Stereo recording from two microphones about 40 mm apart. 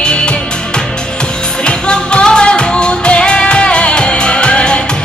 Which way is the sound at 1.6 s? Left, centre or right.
Left.